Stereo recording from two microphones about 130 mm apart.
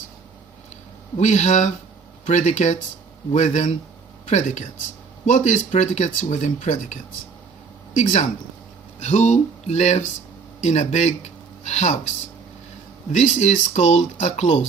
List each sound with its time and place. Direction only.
1.1 s speech: 65° left (ahead or behind)
9.0 s speech: 60° left (ahead or behind)
13.1 s speech: 65° left (ahead or behind)